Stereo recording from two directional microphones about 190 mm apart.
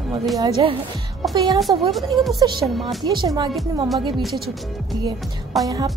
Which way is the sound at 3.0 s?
20° right (ahead or behind).